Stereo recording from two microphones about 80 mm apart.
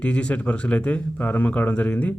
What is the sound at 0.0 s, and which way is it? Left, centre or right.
Speech, centre.